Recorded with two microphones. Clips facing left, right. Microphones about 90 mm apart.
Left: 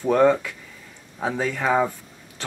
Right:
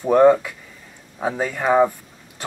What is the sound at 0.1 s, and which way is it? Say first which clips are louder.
Speech: right 4 dB; 15° right (ahead or behind).